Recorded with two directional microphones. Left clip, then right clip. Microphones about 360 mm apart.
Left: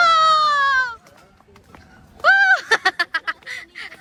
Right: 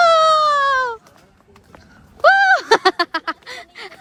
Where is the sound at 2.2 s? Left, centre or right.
Centre.